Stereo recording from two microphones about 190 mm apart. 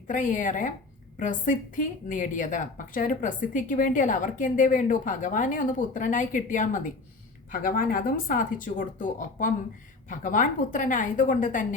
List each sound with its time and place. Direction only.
0.1 s a woman's voice: 45° left (ahead or behind)